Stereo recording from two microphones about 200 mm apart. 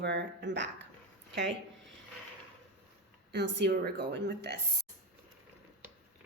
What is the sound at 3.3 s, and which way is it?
Speech, 55° right (ahead or behind).